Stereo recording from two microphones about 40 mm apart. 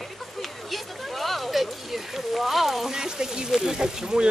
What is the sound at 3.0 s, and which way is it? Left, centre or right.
Speech, centre.